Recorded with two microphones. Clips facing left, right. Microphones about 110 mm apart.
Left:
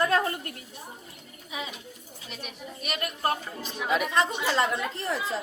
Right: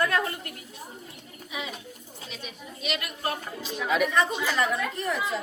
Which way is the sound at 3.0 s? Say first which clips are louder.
Left 4 dB; 45° left (ahead or behind).